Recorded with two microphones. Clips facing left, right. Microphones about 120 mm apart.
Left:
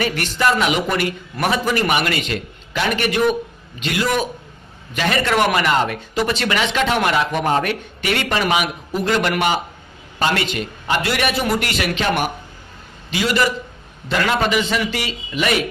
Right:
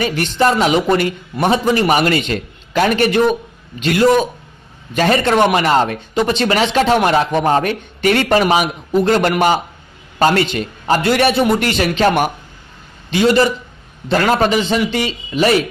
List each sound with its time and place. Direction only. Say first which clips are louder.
0.0 s a man's voice: right 4 dB; 30° right (ahead or behind)
2.0 s speech: right 6 dB; 35° right (ahead or behind)
3.8 s a man's voice: right 9 dB; 45° right (ahead or behind)
4.9 s speech: right 5 dB; 35° right (ahead or behind)
9.0 s a man's voice: right 3 dB; 40° right (ahead or behind)